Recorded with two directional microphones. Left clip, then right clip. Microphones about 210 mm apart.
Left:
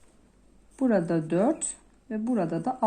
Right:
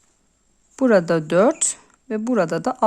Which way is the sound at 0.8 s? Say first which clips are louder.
Right 9 dB; 45° right (ahead or behind).